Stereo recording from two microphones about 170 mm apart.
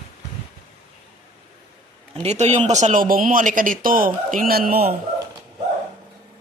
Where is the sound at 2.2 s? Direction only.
40° right (ahead or behind); by 5.0 s 65° right (ahead or behind).